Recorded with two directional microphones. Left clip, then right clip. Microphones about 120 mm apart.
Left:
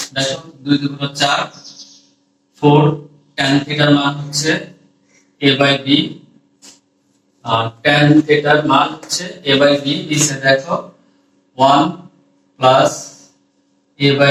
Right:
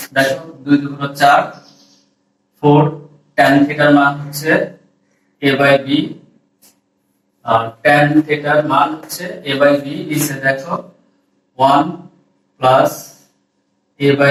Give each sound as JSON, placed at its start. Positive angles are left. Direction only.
{"t": 0.0, "sound": "a man's voice", "side_deg": 30}
{"t": 7.4, "sound": "a man's voice", "side_deg": 30}
{"t": 12.5, "sound": "a sound", "side_deg": 30}
{"t": 13.9, "sound": "a man's voice", "side_deg": 30}